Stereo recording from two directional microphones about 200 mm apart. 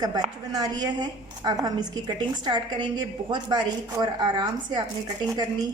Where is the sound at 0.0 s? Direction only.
20° right (ahead or behind).